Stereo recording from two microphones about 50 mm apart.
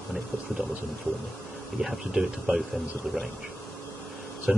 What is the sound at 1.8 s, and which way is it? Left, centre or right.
Speech, centre.